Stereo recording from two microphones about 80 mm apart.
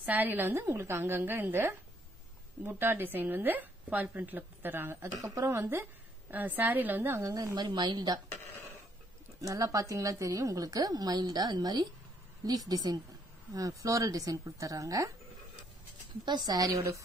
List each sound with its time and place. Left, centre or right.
0.0 s a woman's voice: right
5.2 s a woman's voice: right
5.5 s a woman's voice: right
7.2 s a woman's voice: right
7.5 s a woman's voice: right
9.4 s a woman's voice: right
16.3 s a woman's voice: right